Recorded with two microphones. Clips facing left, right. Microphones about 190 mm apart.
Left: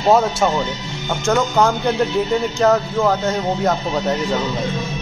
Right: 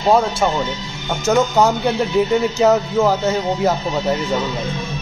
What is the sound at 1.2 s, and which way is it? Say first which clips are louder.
A man's voice: right 2 dB; 10° right (ahead or behind).